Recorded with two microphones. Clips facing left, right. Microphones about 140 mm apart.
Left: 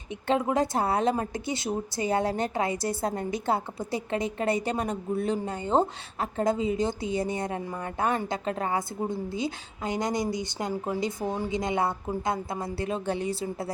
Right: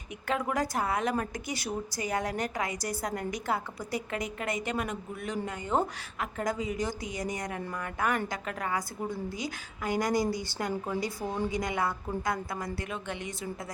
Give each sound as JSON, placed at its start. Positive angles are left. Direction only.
{"t": 0.3, "sound": "a woman's voice", "side_deg": 25}